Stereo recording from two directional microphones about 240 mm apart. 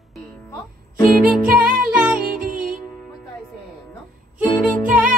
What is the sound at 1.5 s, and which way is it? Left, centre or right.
Music, right.